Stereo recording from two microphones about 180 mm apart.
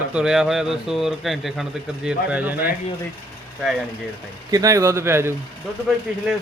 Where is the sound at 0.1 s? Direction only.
5° right (ahead or behind).